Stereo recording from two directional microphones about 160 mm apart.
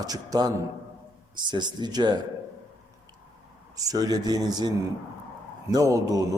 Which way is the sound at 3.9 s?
25° right (ahead or behind).